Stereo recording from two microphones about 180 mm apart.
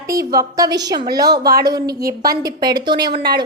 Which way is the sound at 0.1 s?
20° right (ahead or behind).